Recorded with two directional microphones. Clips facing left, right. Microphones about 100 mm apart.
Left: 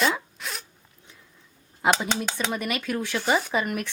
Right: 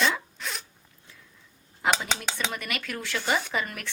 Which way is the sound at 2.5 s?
20° left (ahead or behind).